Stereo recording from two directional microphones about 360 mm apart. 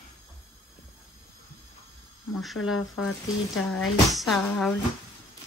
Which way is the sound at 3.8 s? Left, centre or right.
Centre.